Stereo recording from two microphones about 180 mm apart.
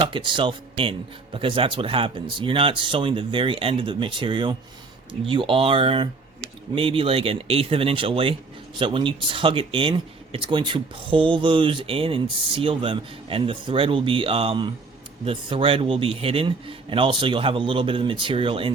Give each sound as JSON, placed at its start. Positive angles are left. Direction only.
{"t": 0.0, "sound": "a man's voice", "side_deg": -30}